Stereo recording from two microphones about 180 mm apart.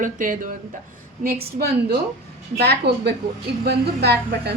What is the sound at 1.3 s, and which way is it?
A woman's voice, 60° right (ahead or behind).